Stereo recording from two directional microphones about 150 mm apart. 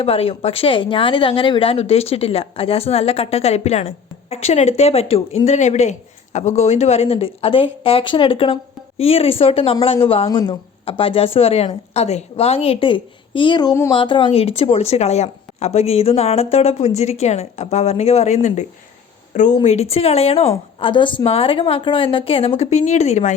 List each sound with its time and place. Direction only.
0.0 s speech: 40° left (ahead or behind)
10.2 s a woman's voice: 25° left (ahead or behind)
10.8 s speech: 40° left (ahead or behind); by 13.9 s 25° left (ahead or behind)
13.9 s speech: 35° left (ahead or behind); by 19.5 s 55° left (ahead or behind)
19.6 s speech: 45° left (ahead or behind)